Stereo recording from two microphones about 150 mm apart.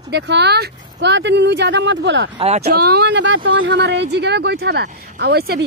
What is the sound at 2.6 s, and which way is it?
Speech, 90° right.